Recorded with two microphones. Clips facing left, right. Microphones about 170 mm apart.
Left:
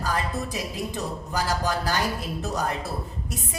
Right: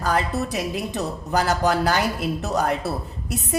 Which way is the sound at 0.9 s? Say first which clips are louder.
Right 5 dB; 70° right (ahead or behind).